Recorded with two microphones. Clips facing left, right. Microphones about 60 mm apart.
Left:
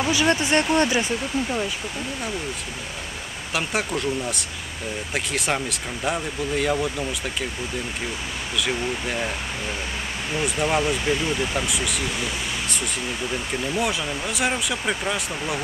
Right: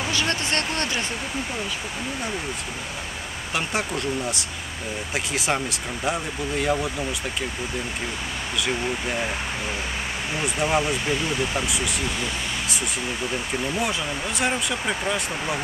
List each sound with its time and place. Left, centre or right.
0.0 s speech: centre
3.5 s speech: centre
8.5 s speech: centre
10.3 s speech: centre